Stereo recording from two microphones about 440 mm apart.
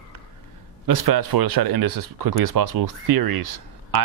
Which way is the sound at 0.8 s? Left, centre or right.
Right.